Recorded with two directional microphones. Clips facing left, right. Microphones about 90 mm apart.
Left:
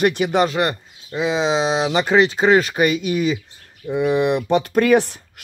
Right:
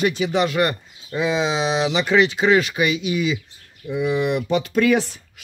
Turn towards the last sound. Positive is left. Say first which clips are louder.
# left 3 dB
turn(degrees=55)  # may be behind; listen again after turning